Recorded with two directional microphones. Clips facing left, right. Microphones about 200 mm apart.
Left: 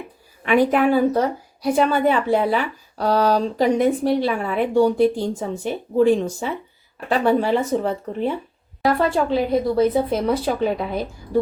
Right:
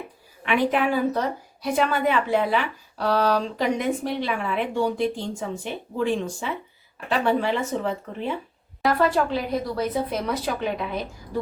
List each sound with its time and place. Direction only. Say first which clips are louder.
0.4 s speech: left 5 dB; 45° left (ahead or behind)
1.6 s speech: left 5 dB; 35° left (ahead or behind)
9.0 s a woman's voice: left 2 dB; 25° left (ahead or behind)